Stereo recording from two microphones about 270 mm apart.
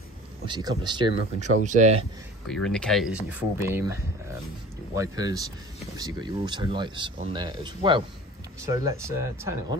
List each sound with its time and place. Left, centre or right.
0.5 s speech: centre
2.4 s speech: centre